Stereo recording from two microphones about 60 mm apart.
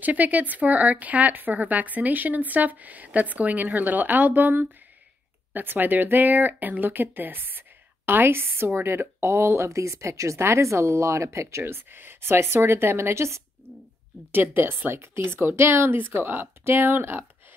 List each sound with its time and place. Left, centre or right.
0.0 s speech: right
14.3 s speech: right